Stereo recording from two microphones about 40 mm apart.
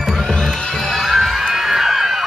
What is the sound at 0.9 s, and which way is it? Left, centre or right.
Music, centre.